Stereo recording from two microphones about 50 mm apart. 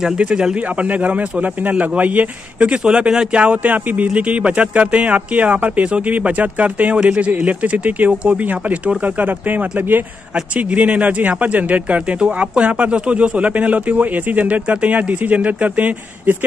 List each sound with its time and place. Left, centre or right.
0.2 s speech: centre
0.6 s speech: right
2.8 s speech: centre; by 10.0 s right
10.5 s speech: right